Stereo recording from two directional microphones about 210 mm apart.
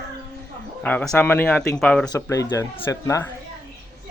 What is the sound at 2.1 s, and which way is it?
A man's voice, 15° left (ahead or behind).